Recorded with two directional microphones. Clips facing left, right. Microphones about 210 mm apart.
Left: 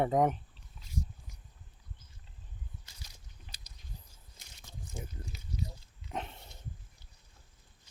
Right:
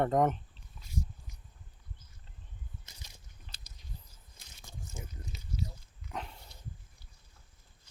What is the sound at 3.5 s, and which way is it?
Chewing, 15° left (ahead or behind).